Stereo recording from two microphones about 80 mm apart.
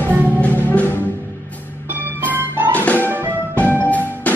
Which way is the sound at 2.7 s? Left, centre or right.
Centre.